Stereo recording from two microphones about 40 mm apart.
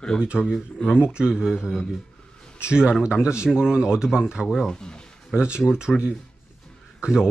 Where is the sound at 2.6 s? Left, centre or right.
Right.